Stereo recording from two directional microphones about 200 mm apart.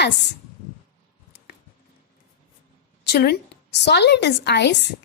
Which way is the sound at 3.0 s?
55° left (ahead or behind).